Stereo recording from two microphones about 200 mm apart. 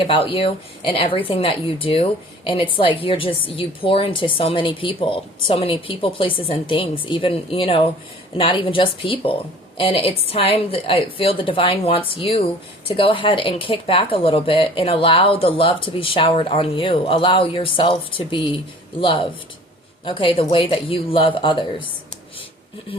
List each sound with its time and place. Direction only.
0.0 s speech: 25° left (ahead or behind)